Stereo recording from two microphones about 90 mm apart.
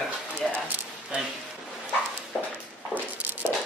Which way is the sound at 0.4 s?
Centre (ahead or behind).